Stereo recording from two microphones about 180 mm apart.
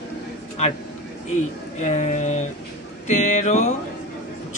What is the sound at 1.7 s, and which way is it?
A woman's voice, 40° left (ahead or behind).